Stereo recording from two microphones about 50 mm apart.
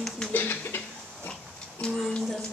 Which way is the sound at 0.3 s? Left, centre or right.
Left.